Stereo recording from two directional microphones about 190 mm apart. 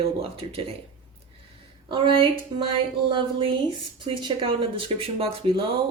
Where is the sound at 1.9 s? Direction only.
25° right (ahead or behind).